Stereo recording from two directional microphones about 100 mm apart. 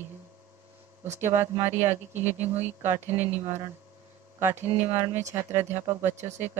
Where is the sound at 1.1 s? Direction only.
25° right (ahead or behind).